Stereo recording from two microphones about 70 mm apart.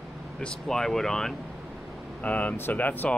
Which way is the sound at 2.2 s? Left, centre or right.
Left.